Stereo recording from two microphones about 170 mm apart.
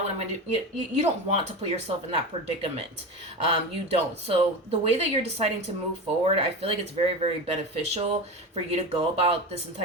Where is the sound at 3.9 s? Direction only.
35° right (ahead or behind).